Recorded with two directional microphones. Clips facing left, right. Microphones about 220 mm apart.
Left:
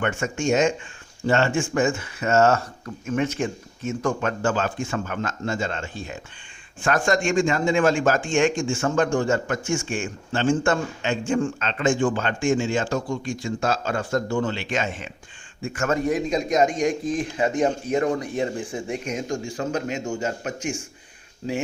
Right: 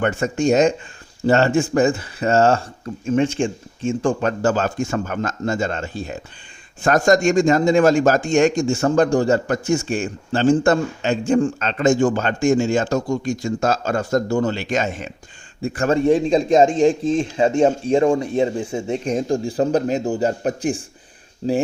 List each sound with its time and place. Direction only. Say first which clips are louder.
0.0 s a man's voice: right 5 dB; 35° right (ahead or behind)